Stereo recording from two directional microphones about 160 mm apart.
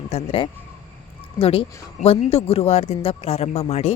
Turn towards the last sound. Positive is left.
turn(degrees=40)  # may be behind; listen again after turning